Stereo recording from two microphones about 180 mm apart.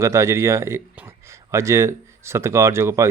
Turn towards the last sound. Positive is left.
turn(degrees=-15)  # may be behind; listen again after turning